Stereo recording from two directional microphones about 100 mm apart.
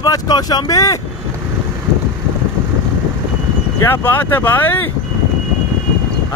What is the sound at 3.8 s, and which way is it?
Speech, 20° left (ahead or behind).